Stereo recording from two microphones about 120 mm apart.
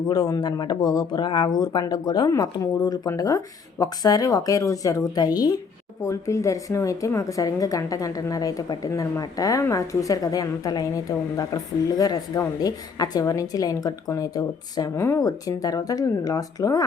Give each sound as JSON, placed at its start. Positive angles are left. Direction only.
{"t": 0.1, "sound": "a woman's voice", "side_deg": 35}